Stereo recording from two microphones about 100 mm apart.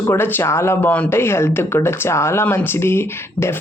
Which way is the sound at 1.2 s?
25° left (ahead or behind).